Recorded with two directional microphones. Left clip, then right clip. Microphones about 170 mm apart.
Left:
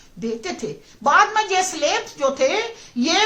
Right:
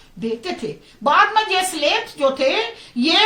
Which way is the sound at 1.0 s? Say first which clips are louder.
Right 1 dB; 15° left (ahead or behind).